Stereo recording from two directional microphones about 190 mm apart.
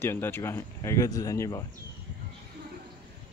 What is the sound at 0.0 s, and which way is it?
Speech, 10° left (ahead or behind).